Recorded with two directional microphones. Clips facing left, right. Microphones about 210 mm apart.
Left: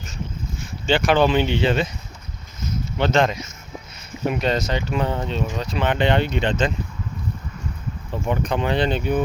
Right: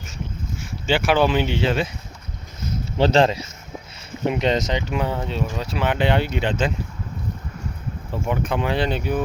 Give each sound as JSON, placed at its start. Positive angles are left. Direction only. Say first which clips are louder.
{"t": 0.6, "sound": "speech", "louder": "left 1 dB", "side_deg": -10}
{"t": 3.0, "sound": "speech", "louder": "right 3 dB", "side_deg": -35}
{"t": 4.3, "sound": "speech", "louder": "right 1 dB", "side_deg": -20}
{"t": 8.3, "sound": "speech", "louder": "left 1 dB", "side_deg": -5}